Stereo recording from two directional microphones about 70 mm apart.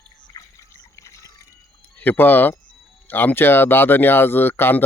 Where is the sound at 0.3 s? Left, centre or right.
Left.